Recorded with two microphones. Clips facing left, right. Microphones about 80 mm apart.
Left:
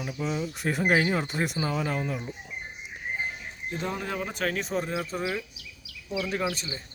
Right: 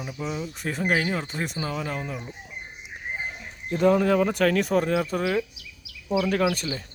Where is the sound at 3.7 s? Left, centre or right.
Right.